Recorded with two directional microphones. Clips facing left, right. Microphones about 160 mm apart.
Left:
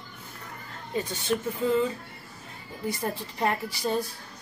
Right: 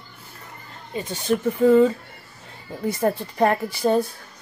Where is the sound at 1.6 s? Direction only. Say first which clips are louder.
Right 11 dB; 65° right (ahead or behind).